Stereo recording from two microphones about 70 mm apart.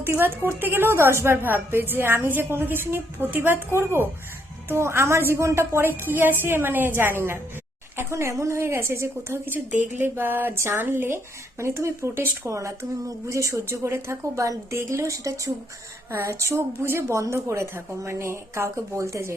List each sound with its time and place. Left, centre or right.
0.2 s a woman's voice: right
4.7 s a woman's voice: right
6.1 s a woman's voice: right